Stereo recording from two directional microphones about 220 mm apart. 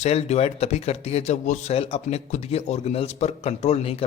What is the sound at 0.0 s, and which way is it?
Speech, 30° left (ahead or behind).